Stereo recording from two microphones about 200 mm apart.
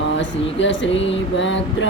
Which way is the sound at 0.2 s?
65° left (ahead or behind).